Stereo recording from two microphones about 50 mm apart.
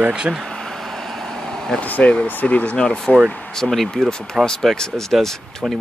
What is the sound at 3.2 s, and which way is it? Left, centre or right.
Speech, left.